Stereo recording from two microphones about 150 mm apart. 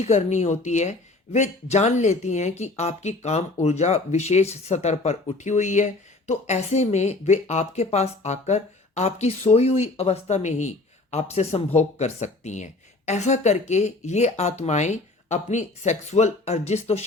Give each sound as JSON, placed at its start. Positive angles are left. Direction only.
{"t": 0.0, "sound": "speech", "side_deg": 50}